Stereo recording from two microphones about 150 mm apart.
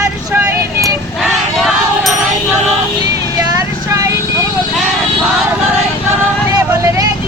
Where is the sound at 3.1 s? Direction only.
20° right (ahead or behind).